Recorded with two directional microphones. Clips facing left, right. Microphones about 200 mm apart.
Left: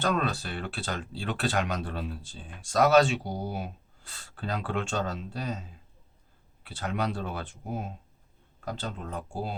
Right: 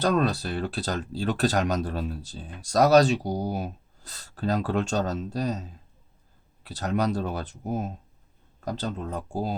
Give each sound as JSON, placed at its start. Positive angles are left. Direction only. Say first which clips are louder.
{"t": 0.0, "sound": "speech", "louder": "right 5 dB", "side_deg": -40}